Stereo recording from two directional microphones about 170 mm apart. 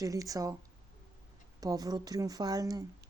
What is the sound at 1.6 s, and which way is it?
Speech, 20° right (ahead or behind).